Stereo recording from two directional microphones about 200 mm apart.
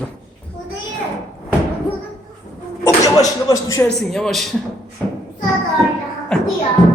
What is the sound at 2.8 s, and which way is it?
Speech, 15° left (ahead or behind).